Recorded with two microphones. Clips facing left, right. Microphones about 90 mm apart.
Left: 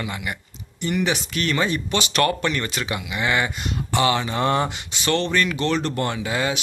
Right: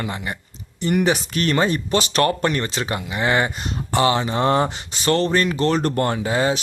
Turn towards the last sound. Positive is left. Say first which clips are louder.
# right 4 dB
turn(degrees=-35)  # may be behind; listen again after turning